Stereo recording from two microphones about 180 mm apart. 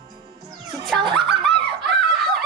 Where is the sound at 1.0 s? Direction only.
25° right (ahead or behind).